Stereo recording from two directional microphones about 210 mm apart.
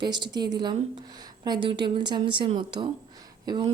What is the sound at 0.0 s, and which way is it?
A woman's voice, 20° right (ahead or behind).